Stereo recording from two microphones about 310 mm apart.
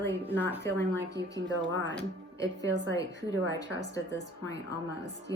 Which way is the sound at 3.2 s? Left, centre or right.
Right.